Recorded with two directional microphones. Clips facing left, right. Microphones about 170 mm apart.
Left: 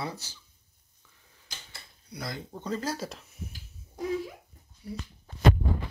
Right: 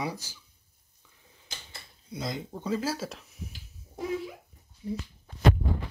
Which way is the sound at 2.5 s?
5° right (ahead or behind).